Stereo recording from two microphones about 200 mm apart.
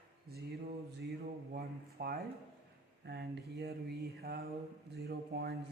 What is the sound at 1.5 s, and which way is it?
Speech, 50° right (ahead or behind).